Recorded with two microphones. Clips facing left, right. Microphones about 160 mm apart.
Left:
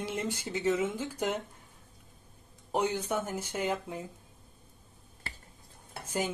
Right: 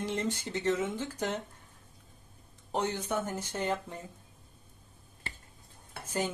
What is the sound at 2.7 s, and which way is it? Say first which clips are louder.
A woman's voice: left 2 dB; 10° left (ahead or behind).